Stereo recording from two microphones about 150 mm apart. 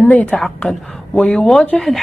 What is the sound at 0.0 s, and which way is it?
A woman's voice, 10° left (ahead or behind).